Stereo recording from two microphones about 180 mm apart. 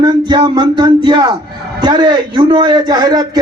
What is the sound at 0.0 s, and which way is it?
A man's voice, 25° right (ahead or behind).